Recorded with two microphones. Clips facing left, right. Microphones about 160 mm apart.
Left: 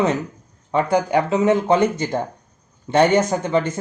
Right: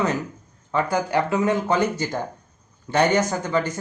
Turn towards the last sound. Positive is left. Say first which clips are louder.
# left 4 dB
turn(degrees=25)  # may be behind; listen again after turning